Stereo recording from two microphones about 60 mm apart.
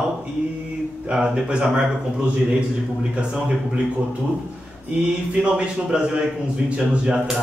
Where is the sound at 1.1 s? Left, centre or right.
Centre.